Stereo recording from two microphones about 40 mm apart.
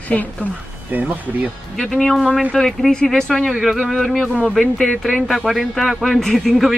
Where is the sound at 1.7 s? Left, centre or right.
Centre.